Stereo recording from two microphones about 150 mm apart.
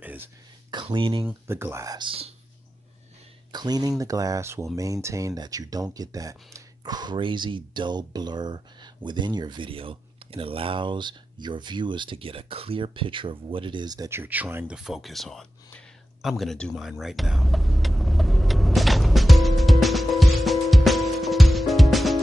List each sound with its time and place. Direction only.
0.0 s a sound: 10° right (ahead or behind)
0.9 s speech: 35° right (ahead or behind)
1.2 s speech: 15° right (ahead or behind); by 2.3 s 35° right (ahead or behind)
3.5 s speech: 25° right (ahead or behind); by 15.4 s centre (ahead or behind)
16.2 s vehicle: centre (ahead or behind)